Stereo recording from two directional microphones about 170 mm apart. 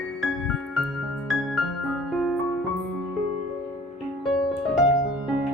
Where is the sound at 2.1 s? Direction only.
Centre (ahead or behind).